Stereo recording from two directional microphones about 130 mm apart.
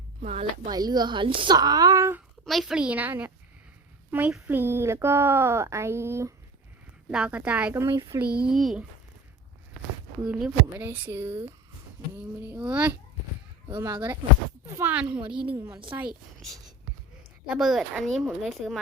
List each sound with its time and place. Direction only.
0.2 s speech: 55° right (ahead or behind)
0.7 s speech: 30° right (ahead or behind)
2.4 s a woman's voice: centre (ahead or behind); by 6.3 s 20° right (ahead or behind)
7.1 s a woman's voice: 10° right (ahead or behind)
10.2 s a woman's voice: 5° right (ahead or behind)
10.8 s a woman's voice: 15° right (ahead or behind)
13.7 s speech: 25° right (ahead or behind)
14.8 s a woman's voice: 10° right (ahead or behind)
15.5 s speech: 25° right (ahead or behind)
17.4 s a woman's voice: 5° right (ahead or behind)